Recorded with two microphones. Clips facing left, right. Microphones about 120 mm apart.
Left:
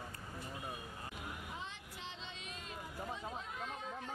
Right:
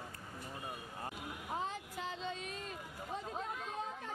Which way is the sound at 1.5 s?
40° right (ahead or behind).